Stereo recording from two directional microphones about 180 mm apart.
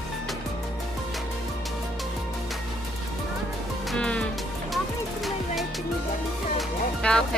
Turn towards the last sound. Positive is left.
turn(degrees=5)  # may be behind; listen again after turning